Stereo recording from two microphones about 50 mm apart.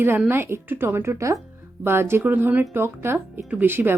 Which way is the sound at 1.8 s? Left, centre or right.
Right.